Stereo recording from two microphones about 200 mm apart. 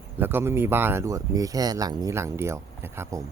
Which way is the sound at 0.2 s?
10° right (ahead or behind).